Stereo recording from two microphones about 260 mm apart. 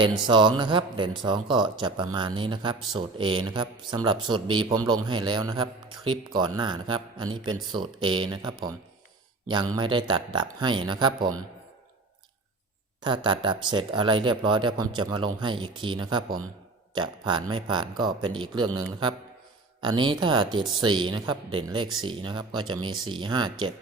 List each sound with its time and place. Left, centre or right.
0.0 s speech: centre
9.7 s speech: centre
13.0 s speech: centre